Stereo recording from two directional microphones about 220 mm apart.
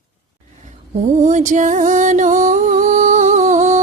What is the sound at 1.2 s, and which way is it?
Music, 35° right (ahead or behind).